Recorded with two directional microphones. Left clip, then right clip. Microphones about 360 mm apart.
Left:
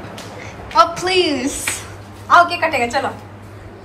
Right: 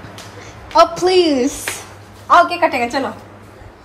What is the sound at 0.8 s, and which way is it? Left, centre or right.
Speech, centre.